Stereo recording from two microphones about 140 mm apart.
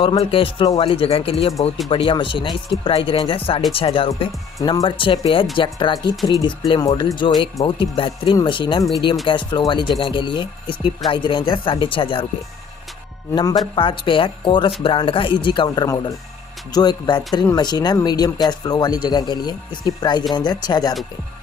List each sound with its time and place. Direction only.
0.2 s speech: 40° left (ahead or behind)
13.3 s speech: 30° left (ahead or behind)